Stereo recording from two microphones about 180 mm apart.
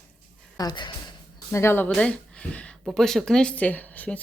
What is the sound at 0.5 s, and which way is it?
Speech, 20° left (ahead or behind).